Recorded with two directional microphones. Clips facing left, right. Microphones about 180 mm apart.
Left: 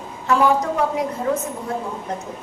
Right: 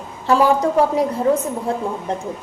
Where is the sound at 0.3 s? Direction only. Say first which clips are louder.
Right 2 dB; 30° right (ahead or behind).